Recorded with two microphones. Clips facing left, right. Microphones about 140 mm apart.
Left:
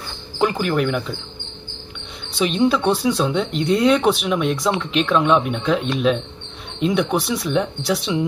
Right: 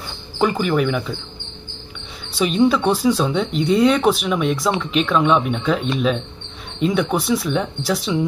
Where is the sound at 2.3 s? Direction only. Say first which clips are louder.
Right 2 dB; centre (ahead or behind).